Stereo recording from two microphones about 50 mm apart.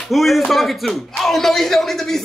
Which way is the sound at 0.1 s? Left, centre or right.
Centre.